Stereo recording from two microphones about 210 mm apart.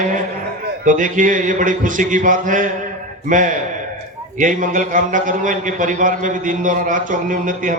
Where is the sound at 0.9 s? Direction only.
40° right (ahead or behind).